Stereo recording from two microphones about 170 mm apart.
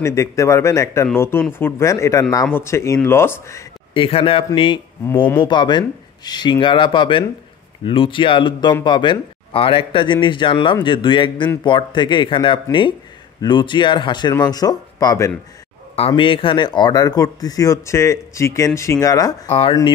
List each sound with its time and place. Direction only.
0.0 s speech: 15° left (ahead or behind)
3.9 s a man's voice: 30° left (ahead or behind)
16.1 s speech: 30° left (ahead or behind)